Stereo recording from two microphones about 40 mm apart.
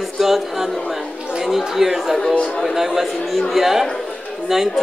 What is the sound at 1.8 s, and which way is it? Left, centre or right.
A man's voice, centre.